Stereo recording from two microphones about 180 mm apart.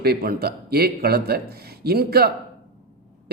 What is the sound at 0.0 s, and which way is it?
Speech, 60° right (ahead or behind).